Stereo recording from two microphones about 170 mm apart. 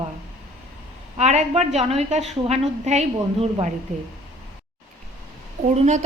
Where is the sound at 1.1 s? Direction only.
40° right (ahead or behind).